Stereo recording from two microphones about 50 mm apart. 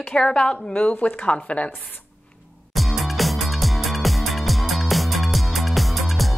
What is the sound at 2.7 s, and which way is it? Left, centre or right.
Music, centre.